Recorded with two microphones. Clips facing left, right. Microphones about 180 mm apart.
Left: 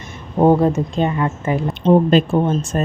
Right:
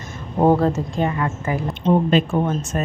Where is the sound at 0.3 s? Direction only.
15° left (ahead or behind).